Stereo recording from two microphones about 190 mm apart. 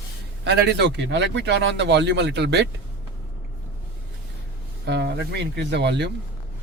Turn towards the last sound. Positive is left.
turn(degrees=-65)  # may be behind; listen again after turning